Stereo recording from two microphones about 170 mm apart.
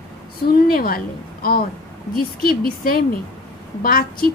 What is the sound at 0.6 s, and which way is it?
A woman's voice, 60° left (ahead or behind).